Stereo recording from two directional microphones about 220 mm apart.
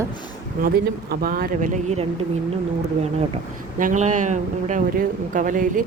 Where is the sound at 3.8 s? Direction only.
35° right (ahead or behind).